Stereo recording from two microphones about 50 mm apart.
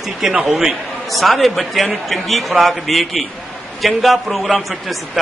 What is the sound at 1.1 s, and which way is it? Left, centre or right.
A man's voice, centre.